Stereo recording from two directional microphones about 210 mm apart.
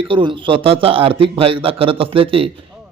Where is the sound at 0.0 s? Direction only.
25° right (ahead or behind).